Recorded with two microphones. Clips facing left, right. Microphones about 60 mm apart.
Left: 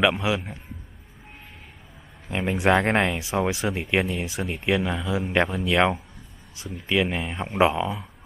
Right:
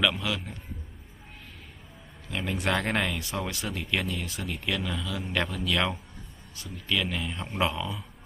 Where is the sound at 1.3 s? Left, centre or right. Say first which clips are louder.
Left 2 dB; left.